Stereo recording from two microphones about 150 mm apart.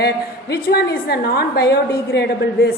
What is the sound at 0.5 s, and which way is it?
A woman's voice, 90° left.